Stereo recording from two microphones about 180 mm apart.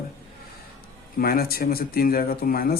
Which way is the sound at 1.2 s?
55° left (ahead or behind).